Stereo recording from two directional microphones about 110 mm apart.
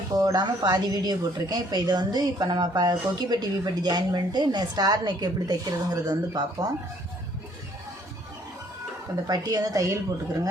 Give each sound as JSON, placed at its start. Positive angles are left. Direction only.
{"t": 0.1, "sound": "speech", "side_deg": -35}
{"t": 9.2, "sound": "speech", "side_deg": -35}